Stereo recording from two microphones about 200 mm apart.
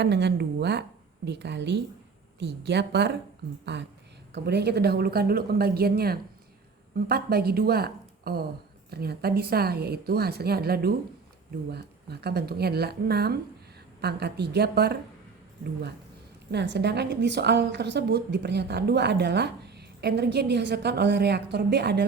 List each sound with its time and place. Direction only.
0.0 s a woman's voice: 60° right (ahead or behind)
4.4 s a woman's voice: 55° right (ahead or behind)
16.5 s a woman's voice: 55° right (ahead or behind)